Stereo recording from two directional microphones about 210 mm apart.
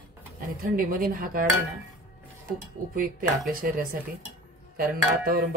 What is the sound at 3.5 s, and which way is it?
Speech, 40° right (ahead or behind).